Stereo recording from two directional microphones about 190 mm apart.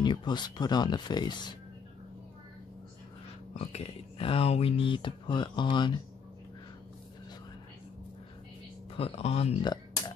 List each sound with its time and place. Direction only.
0.0 s speech: 25° left (ahead or behind)
3.5 s speech: 35° left (ahead or behind)
8.9 s speech: 30° left (ahead or behind)